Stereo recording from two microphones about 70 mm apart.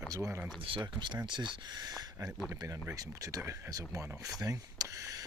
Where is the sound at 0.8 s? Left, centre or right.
Right.